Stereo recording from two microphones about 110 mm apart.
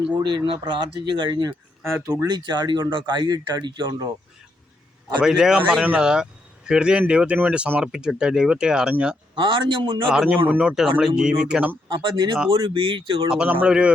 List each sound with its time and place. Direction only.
0.2 s speech: 45° right (ahead or behind)
5.2 s a man's voice: 5° right (ahead or behind)
9.3 s speech: 45° right (ahead or behind)
10.1 s speech: 10° right (ahead or behind)
11.9 s speech: 45° right (ahead or behind)
13.3 s speech: 10° right (ahead or behind)